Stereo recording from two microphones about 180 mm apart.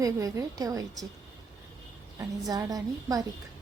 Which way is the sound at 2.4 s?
20° right (ahead or behind).